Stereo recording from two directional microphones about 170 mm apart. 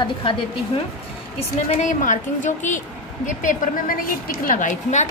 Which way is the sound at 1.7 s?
45° left (ahead or behind).